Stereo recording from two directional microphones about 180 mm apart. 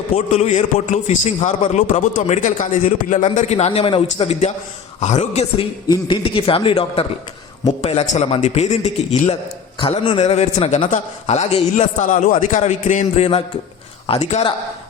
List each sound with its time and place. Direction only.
0.3 s a man's voice: 40° left (ahead or behind)